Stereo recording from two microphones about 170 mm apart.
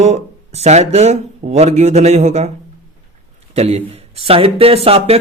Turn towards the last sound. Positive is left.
turn(degrees=-35)  # may be behind; listen again after turning